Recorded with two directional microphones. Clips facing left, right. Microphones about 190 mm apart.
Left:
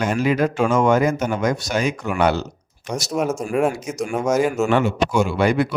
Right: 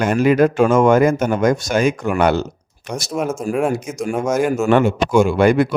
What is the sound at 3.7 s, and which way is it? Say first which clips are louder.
Speech: right 5 dB; 55° right (ahead or behind).